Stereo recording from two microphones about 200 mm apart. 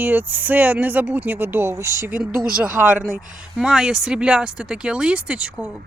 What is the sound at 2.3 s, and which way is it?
Speech, 45° right (ahead or behind).